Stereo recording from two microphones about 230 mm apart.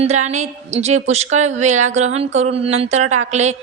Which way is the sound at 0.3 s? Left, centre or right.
Right.